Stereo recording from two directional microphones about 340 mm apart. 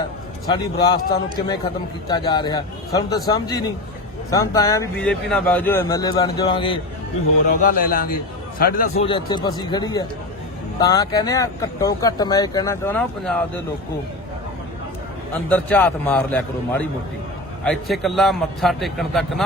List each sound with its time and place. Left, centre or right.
0.4 s speech: centre
2.0 s speech: centre
7.4 s speech: left; by 13.4 s centre
15.3 s a man's voice: centre